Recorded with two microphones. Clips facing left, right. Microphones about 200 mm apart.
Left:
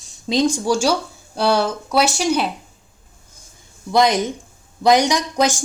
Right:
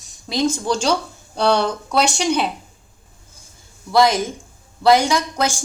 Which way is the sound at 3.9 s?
20° left (ahead or behind).